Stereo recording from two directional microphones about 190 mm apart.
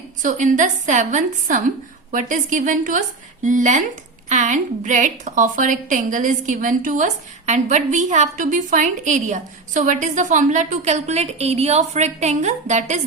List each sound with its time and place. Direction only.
0.2 s a woman's voice: 45° right (ahead or behind)